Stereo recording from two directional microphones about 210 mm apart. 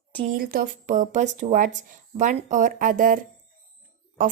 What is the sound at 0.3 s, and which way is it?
Speech, 45° right (ahead or behind).